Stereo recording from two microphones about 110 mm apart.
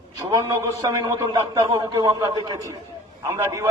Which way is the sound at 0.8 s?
40° right (ahead or behind).